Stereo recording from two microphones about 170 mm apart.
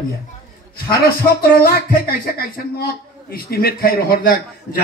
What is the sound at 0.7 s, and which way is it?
Speech, 60° left (ahead or behind).